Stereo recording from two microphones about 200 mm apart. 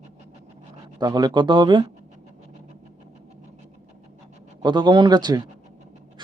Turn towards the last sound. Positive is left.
turn(degrees=-20)  # may be behind; listen again after turning